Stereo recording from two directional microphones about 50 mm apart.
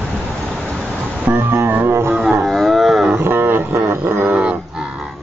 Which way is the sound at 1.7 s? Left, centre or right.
Right.